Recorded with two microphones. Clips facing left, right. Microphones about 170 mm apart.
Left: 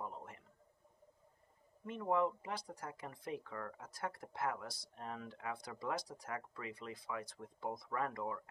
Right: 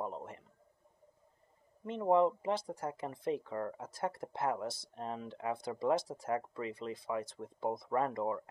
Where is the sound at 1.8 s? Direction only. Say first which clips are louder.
Right 7 dB; 25° right (ahead or behind).